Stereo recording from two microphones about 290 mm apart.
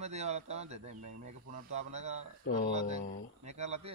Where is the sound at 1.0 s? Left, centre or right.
Right.